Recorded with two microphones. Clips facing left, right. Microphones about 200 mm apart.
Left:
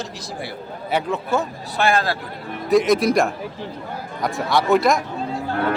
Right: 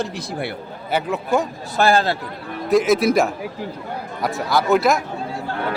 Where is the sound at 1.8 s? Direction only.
30° right (ahead or behind).